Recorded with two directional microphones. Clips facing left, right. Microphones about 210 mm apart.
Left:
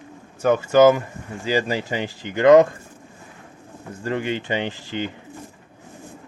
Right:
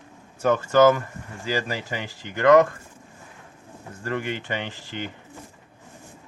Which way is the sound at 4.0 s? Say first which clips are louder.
Left 4 dB; 20° left (ahead or behind).